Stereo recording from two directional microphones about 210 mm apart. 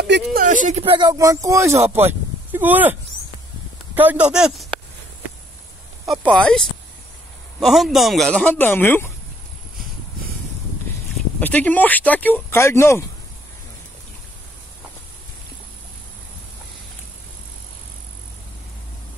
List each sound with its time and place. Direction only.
0.0 s speech: 50° right (ahead or behind); by 4.6 s centre (ahead or behind)
6.0 s speech: centre (ahead or behind)
7.6 s speech: centre (ahead or behind)
11.3 s speech: 5° left (ahead or behind)